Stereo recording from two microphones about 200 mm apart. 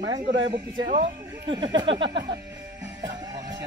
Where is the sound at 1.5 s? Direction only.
20° right (ahead or behind).